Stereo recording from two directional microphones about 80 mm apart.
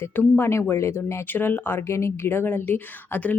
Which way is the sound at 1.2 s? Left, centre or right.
Left.